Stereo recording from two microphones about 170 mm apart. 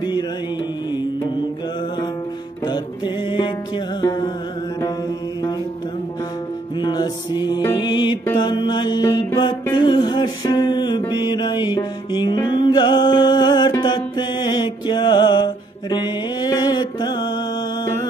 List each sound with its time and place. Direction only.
3.3 s music: 25° left (ahead or behind)
6.8 s music: 25° left (ahead or behind)